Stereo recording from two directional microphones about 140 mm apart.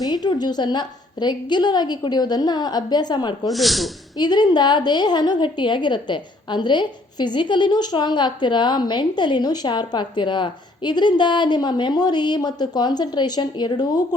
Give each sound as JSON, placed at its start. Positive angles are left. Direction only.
{"t": 0.1, "sound": "a woman's voice", "side_deg": 30}
{"t": 3.5, "sound": "speech", "side_deg": 0}
{"t": 4.2, "sound": "a woman's voice", "side_deg": 30}